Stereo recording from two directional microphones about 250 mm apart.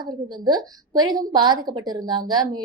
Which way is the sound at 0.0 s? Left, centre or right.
Centre.